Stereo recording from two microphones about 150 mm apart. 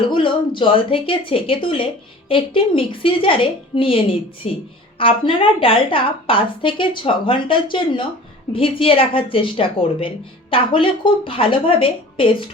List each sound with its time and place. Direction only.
0.1 s a woman's voice: 35° left (ahead or behind)